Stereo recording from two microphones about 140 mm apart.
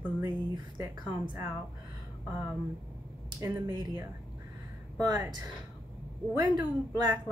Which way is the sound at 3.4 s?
25° right (ahead or behind).